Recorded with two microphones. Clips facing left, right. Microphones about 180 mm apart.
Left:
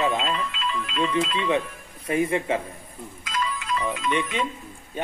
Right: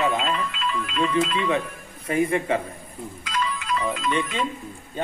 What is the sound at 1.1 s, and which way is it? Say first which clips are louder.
Speech: right 1 dB; 20° left (ahead or behind).